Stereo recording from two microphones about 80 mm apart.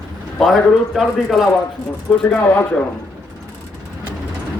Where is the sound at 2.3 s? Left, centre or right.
Left.